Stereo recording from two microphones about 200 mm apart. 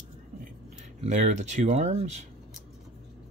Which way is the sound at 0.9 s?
35° right (ahead or behind).